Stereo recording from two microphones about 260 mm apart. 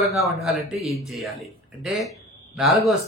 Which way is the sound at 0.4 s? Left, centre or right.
Right.